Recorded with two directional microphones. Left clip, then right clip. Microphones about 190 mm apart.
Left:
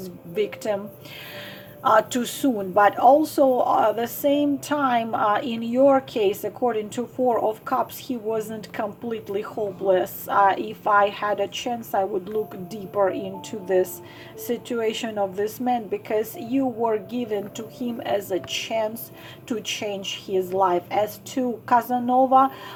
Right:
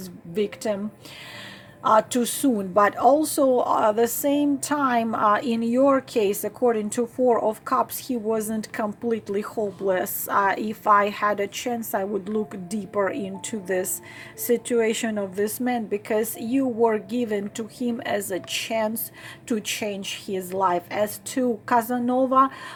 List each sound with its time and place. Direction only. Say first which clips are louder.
1.9 s speech: even; 30° right (ahead or behind)